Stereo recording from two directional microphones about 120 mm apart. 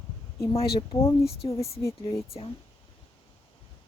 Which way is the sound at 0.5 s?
50° left (ahead or behind).